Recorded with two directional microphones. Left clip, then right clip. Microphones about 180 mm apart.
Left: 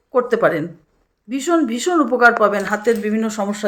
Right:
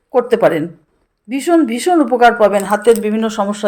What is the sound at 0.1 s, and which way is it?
A woman's voice, 20° right (ahead or behind).